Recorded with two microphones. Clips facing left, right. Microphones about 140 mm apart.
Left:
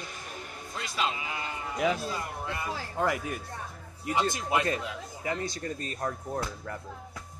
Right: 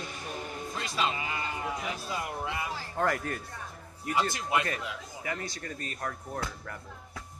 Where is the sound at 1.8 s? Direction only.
90° left.